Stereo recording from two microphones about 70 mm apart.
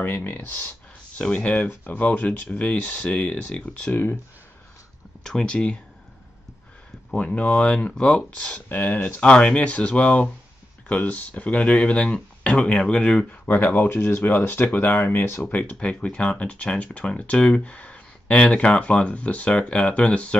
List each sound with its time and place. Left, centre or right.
0.0 s speech: left
3.9 s speech: left
5.2 s speech: centre
7.2 s speech: centre
8.6 s speech: left
9.2 s speech: centre